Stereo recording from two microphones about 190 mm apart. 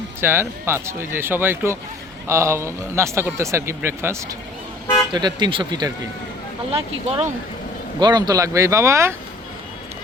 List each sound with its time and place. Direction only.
0.2 s speech: 10° right (ahead or behind)